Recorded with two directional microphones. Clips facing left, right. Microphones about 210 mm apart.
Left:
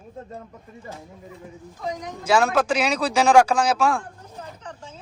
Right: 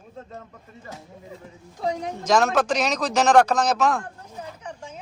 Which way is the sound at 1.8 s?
30° right (ahead or behind).